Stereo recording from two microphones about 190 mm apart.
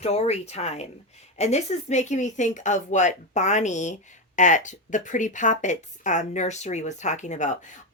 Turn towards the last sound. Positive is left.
turn(degrees=40)  # may be behind; listen again after turning